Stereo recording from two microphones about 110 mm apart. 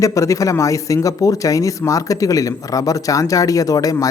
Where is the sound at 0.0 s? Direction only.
30° left (ahead or behind).